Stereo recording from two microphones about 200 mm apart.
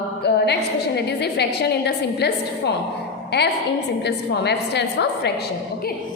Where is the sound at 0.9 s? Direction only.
55° left (ahead or behind).